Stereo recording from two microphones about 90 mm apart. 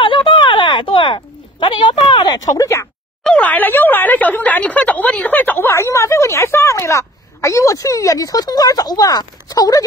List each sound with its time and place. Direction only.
0.0 s a sound: 65° left (ahead or behind)
2.5 s speech: 35° left (ahead or behind)
3.3 s speech: 15° left (ahead or behind); by 9.8 s 40° left (ahead or behind)